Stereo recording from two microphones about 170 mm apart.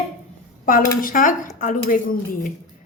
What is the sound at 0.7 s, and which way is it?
Speech, 55° left (ahead or behind).